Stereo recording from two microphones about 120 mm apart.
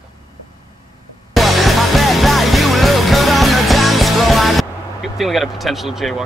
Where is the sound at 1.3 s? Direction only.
Centre (ahead or behind).